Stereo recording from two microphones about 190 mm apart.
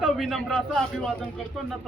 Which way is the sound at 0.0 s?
Centre (ahead or behind).